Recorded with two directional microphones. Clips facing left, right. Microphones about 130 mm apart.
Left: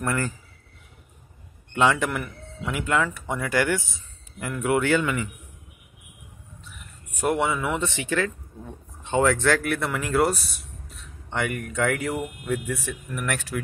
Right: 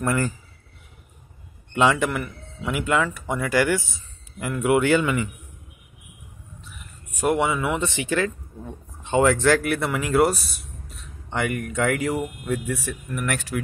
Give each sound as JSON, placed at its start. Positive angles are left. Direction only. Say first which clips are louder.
{"t": 0.0, "sound": "speech", "louder": "right 3 dB", "side_deg": -20}
{"t": 1.8, "sound": "a man's voice", "louder": "right 2 dB", "side_deg": -5}
{"t": 7.2, "sound": "speech", "louder": "right 2 dB", "side_deg": -10}